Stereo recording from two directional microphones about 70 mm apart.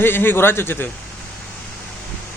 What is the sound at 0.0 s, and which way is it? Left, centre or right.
Speech, left.